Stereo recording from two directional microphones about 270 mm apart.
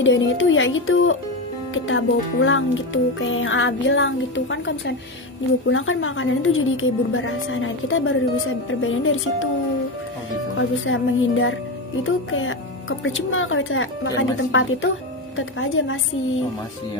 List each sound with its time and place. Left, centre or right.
0.0 s speech: left
10.6 s speech: left